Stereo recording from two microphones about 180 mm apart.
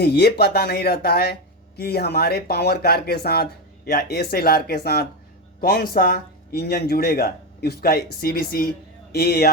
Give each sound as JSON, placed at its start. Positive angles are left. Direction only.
{"t": 0.0, "sound": "speech", "side_deg": 60}